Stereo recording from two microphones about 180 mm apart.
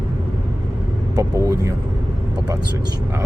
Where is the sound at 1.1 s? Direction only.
20° right (ahead or behind).